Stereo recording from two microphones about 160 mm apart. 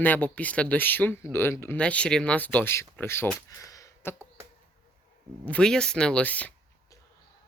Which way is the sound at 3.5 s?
20° left (ahead or behind).